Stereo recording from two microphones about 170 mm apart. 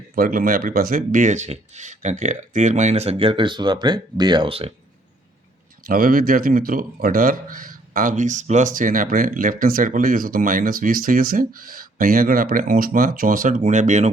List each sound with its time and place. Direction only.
0.2 s speech: 55° right (ahead or behind); by 4.7 s 35° right (ahead or behind)
5.9 s speech: 55° right (ahead or behind)